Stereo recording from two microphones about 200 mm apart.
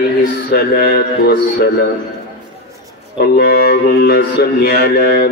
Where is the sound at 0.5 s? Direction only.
50° left (ahead or behind).